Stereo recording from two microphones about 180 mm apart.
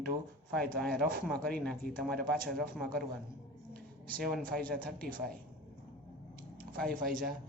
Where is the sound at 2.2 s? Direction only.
60° right (ahead or behind).